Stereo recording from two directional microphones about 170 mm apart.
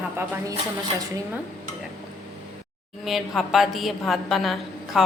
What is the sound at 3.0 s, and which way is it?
A woman's voice, centre (ahead or behind).